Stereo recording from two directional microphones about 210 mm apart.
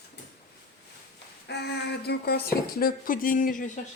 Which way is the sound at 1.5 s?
50° left (ahead or behind).